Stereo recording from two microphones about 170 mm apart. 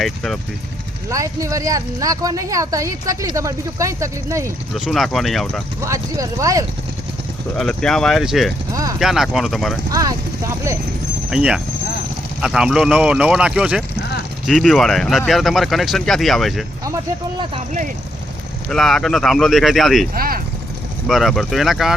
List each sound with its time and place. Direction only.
0.0 s speech: centre (ahead or behind)
1.1 s speech: 20° right (ahead or behind)
4.9 s speech: centre (ahead or behind)
5.8 s speech: 20° right (ahead or behind)
7.5 s speech: 5° left (ahead or behind)
8.7 s speech: 20° right (ahead or behind)
9.0 s speech: centre (ahead or behind)
9.9 s speech: 20° right (ahead or behind)
11.3 s speech: 5° right (ahead or behind)
16.8 s speech: 20° right (ahead or behind)
18.7 s speech: centre (ahead or behind)
20.1 s vehicle: 60° right (ahead or behind)
21.1 s speech: centre (ahead or behind)